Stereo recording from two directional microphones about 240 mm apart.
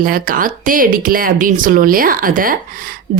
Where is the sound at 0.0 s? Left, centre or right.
Right.